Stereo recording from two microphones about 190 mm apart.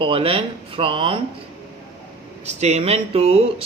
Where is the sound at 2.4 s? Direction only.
35° right (ahead or behind).